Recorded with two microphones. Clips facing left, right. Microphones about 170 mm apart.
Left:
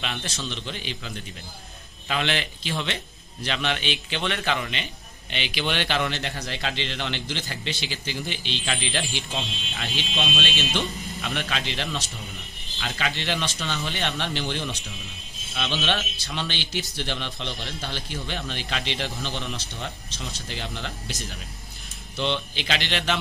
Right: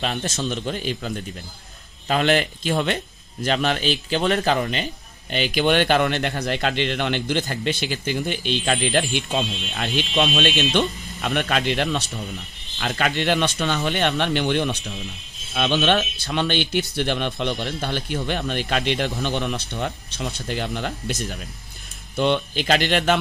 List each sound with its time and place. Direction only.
0.0 s a man's voice: 40° right (ahead or behind)
9.3 s a man's voice: 65° right (ahead or behind)
22.1 s a man's voice: 50° right (ahead or behind)